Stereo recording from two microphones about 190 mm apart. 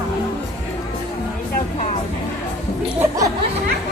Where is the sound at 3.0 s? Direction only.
15° right (ahead or behind).